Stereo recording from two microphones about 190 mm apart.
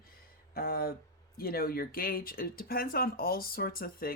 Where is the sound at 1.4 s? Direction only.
50° left (ahead or behind).